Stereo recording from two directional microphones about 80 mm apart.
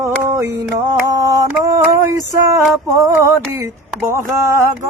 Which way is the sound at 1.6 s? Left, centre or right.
Right.